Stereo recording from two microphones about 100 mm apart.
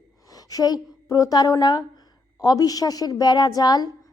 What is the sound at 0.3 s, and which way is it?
A woman's voice, 35° left (ahead or behind).